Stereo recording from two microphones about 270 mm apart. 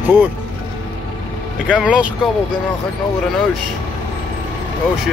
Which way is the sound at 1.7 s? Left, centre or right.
Centre.